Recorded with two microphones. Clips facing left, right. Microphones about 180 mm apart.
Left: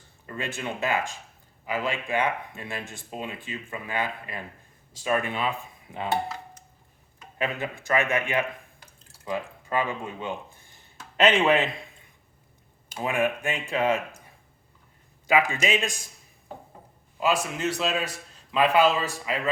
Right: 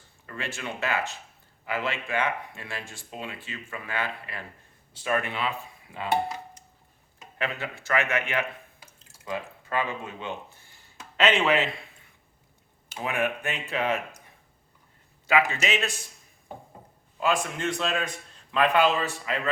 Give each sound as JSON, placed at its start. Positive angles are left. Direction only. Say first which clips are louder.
{"t": 0.3, "sound": "a man's voice", "louder": "left 3 dB", "side_deg": 20}
{"t": 7.3, "sound": "a man's voice", "louder": "left 3 dB", "side_deg": 15}
{"t": 13.1, "sound": "a man's voice", "louder": "left 3 dB", "side_deg": 10}
{"t": 15.3, "sound": "a man's voice", "louder": "left 1 dB", "side_deg": 15}
{"t": 17.2, "sound": "a man's voice", "louder": "left 1 dB", "side_deg": 10}